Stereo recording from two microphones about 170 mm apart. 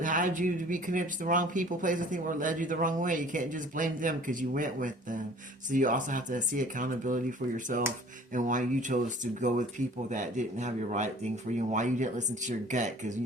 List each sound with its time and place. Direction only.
0.0 s speech: 50° right (ahead or behind)